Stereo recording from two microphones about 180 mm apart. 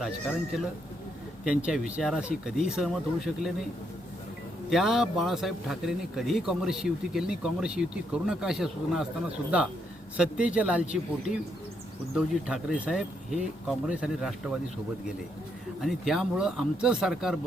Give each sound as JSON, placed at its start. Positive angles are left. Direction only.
{"t": 0.0, "sound": "speech", "side_deg": -5}
{"t": 4.7, "sound": "speech", "side_deg": 0}
{"t": 10.2, "sound": "a man's voice", "side_deg": -5}
{"t": 12.1, "sound": "speech", "side_deg": 0}
{"t": 15.8, "sound": "speech", "side_deg": 0}